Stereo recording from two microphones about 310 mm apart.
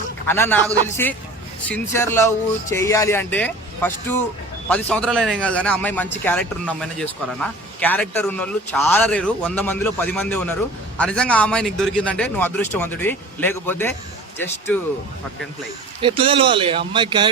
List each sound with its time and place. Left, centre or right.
0.3 s a man's voice: centre
16.0 s speech: centre